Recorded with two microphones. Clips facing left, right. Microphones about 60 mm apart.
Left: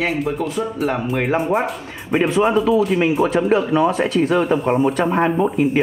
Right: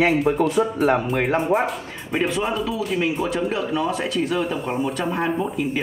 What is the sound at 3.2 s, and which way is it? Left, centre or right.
A man's voice, left.